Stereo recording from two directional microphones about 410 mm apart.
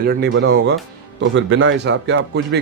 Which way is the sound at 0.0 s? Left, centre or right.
Right.